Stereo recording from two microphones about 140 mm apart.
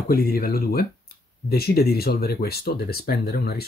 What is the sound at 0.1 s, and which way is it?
Speech, 90° left.